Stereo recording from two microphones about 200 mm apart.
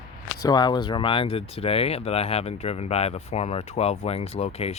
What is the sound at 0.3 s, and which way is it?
Speech, 20° left (ahead or behind).